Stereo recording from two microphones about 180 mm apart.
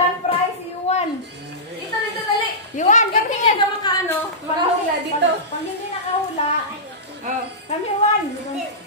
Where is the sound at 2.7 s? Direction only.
40° left (ahead or behind).